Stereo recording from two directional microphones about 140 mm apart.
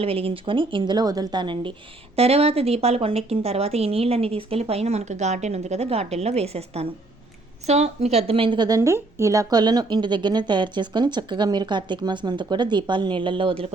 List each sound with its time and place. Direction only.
0.0 s speech: 40° right (ahead or behind)
2.1 s speech: 45° right (ahead or behind)